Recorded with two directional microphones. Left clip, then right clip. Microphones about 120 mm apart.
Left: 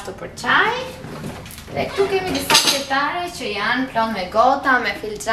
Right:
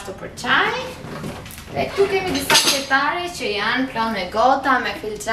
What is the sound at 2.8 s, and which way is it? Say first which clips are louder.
A woman's voice: right 1 dB; 15° right (ahead or behind).